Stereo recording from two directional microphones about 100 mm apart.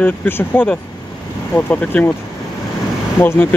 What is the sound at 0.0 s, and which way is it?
Speech, 20° left (ahead or behind).